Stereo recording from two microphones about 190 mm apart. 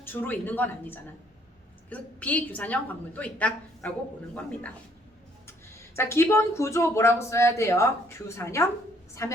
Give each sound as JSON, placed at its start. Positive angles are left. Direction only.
{"t": 0.0, "sound": "speech", "side_deg": 10}
{"t": 6.0, "sound": "speech", "side_deg": 15}